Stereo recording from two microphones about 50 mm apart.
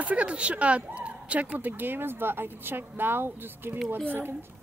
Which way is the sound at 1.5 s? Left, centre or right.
Right.